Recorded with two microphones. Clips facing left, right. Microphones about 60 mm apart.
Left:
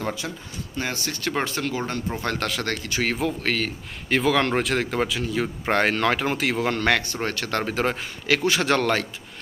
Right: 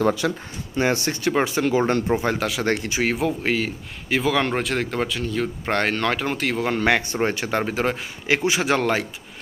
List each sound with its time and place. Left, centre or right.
0.8 s speech: right
1.2 s speech: centre
1.8 s speech: right
2.4 s speech: centre
2.6 s speech: right
2.9 s speech: centre
7.0 s speech: right; by 7.9 s centre
8.3 s speech: right
8.5 s speech: centre